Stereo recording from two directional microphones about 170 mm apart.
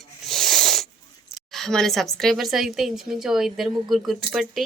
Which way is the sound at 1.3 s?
Centre (ahead or behind).